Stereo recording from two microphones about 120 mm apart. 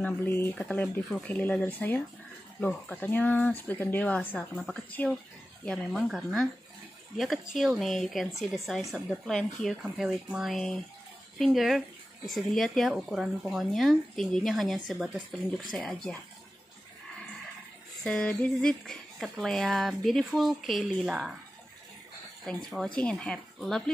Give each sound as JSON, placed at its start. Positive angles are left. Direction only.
{"t": 0.0, "sound": "speech", "side_deg": 15}
{"t": 5.9, "sound": "speech", "side_deg": 0}
{"t": 18.0, "sound": "speech", "side_deg": 5}
{"t": 22.4, "sound": "speech", "side_deg": 5}